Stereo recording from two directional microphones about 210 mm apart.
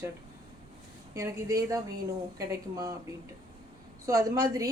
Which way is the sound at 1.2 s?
15° right (ahead or behind).